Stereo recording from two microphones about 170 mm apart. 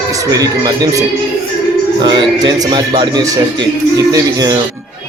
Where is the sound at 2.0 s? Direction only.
25° right (ahead or behind).